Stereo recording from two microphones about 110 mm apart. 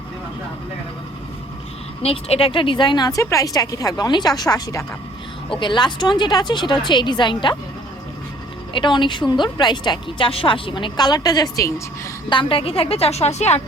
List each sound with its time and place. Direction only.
2.0 s speech: 65° left (ahead or behind); by 4.9 s 35° left (ahead or behind)
5.5 s speech: 45° left (ahead or behind)
8.7 s speech: 45° left (ahead or behind)
12.3 s a woman's voice: 50° left (ahead or behind); by 13.6 s 80° left